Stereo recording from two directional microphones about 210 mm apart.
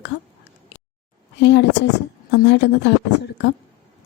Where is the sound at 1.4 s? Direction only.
55° left (ahead or behind).